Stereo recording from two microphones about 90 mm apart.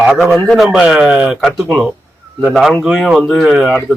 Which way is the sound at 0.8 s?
10° right (ahead or behind).